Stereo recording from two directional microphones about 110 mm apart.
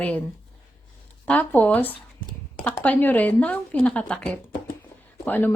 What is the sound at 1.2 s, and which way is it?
A woman's voice, 15° left (ahead or behind).